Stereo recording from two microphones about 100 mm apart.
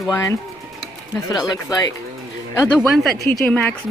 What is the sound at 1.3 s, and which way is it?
Speech, 40° left (ahead or behind).